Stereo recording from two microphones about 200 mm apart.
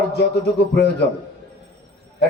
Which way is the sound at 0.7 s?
60° left (ahead or behind).